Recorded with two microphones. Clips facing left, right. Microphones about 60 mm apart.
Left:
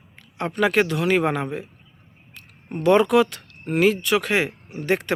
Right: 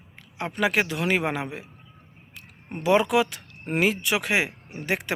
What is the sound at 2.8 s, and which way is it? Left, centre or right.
Speech, centre.